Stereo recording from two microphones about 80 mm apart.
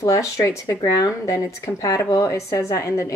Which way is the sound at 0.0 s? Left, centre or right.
Left.